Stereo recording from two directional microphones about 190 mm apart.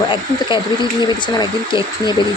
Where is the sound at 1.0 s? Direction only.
25° left (ahead or behind).